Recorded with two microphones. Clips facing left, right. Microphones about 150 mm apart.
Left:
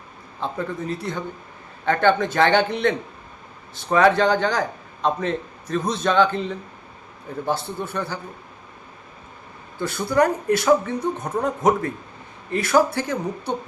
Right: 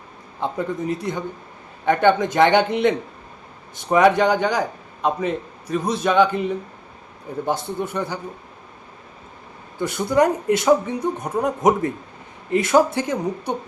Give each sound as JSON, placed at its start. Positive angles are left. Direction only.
{"t": 0.3, "sound": "speech", "side_deg": -15}
{"t": 9.7, "sound": "speech", "side_deg": -15}